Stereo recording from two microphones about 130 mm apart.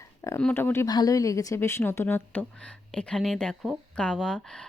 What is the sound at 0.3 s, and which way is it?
Speech, 15° left (ahead or behind).